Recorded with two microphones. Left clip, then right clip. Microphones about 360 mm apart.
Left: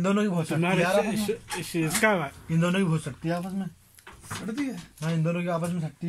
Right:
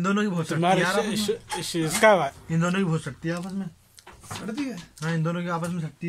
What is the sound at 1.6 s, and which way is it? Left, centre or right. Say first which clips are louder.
Speech: right 5 dB; centre.